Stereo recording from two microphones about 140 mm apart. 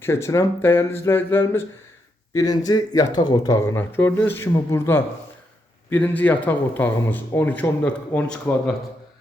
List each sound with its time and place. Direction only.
0.0 s a man's voice: 20° left (ahead or behind)